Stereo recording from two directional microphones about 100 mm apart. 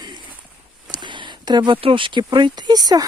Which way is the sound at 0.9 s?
50° right (ahead or behind).